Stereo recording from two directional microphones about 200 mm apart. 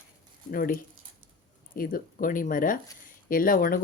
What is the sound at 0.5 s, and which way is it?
Speech, 45° left (ahead or behind).